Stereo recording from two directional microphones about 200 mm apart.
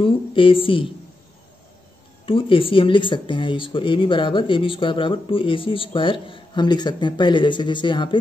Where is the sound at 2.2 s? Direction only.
25° left (ahead or behind).